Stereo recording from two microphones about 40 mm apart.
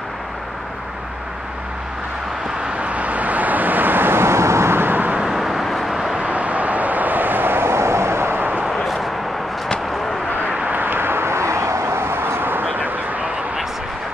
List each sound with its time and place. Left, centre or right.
2.8 s vehicle: right
5.2 s vehicle: centre
6.1 s vehicle: right
10.7 s vehicle: right
11.8 s a sound: right
12.7 s a sound: right